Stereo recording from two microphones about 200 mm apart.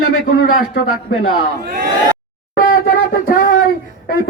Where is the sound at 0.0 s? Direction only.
90° left.